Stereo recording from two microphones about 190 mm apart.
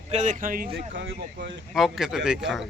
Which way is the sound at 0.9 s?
70° right (ahead or behind).